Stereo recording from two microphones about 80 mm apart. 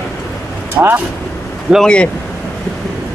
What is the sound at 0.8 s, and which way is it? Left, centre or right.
Speech, right.